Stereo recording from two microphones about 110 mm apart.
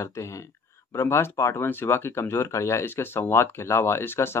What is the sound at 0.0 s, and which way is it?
Speech, 25° left (ahead or behind).